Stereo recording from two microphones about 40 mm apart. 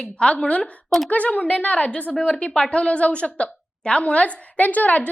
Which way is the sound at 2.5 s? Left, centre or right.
Left.